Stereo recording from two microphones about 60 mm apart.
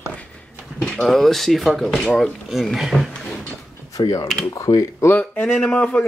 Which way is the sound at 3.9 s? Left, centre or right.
Left.